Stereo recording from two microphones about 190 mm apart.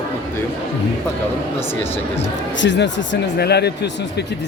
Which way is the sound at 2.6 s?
70° left (ahead or behind).